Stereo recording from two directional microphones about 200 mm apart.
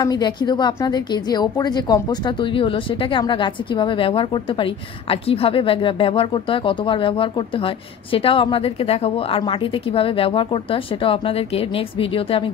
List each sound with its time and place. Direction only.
0.0 s a woman's voice: 20° left (ahead or behind)